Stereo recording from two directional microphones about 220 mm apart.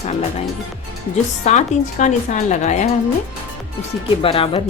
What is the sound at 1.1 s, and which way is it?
A woman's voice, 30° left (ahead or behind).